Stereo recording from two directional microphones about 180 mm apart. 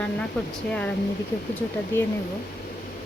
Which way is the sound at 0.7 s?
5° left (ahead or behind).